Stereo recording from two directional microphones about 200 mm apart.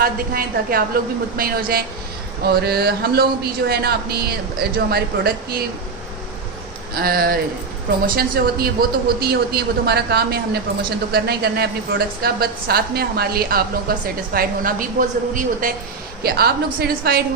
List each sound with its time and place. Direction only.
0.0 s speech: 50° right (ahead or behind)
6.9 s speech: 50° right (ahead or behind)